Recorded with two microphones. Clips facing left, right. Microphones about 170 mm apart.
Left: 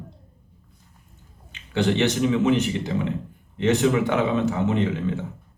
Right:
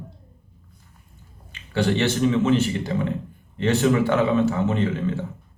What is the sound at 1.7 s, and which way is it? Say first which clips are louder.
A man's voice: even; 20° left (ahead or behind).